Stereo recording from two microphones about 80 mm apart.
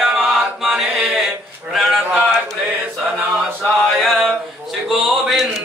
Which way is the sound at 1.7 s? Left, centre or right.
Centre.